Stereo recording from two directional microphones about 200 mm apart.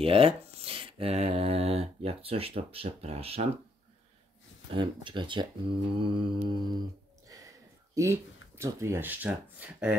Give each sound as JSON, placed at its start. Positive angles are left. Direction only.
{"t": 0.0, "sound": "speech", "side_deg": -30}
{"t": 4.7, "sound": "speech", "side_deg": -25}